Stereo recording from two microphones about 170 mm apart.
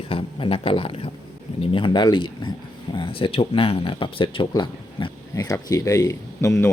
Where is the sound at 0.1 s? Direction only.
35° left (ahead or behind).